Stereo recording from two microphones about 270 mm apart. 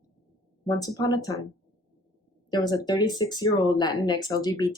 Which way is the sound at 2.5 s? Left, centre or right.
Centre.